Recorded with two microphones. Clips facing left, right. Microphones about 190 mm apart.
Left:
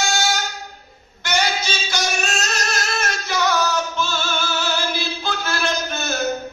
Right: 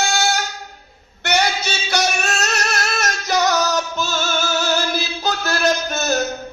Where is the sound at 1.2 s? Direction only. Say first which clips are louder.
Right 3 dB; 65° right (ahead or behind).